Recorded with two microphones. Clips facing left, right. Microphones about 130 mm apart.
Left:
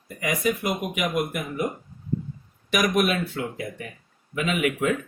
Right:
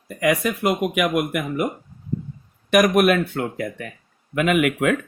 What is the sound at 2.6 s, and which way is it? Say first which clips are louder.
Speech: right 7 dB; 55° right (ahead or behind).